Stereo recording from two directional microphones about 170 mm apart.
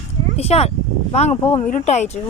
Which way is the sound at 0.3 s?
35° left (ahead or behind).